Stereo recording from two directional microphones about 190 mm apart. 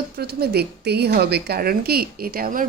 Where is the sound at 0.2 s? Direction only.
55° right (ahead or behind).